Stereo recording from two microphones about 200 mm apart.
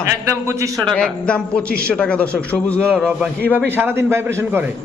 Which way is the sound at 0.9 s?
5° left (ahead or behind).